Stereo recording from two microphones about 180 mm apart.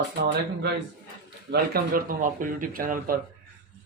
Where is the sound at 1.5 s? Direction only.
55° right (ahead or behind).